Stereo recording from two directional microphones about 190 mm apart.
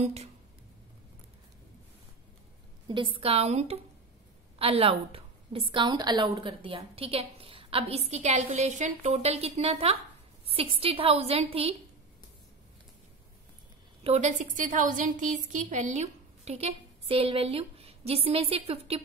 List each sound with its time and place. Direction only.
0.0 s a woman's voice: 35° right (ahead or behind)
2.9 s a woman's voice: 25° right (ahead or behind)
14.0 s a woman's voice: 35° right (ahead or behind)